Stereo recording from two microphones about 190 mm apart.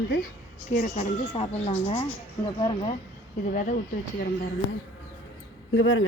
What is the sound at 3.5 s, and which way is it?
Speech, 40° left (ahead or behind).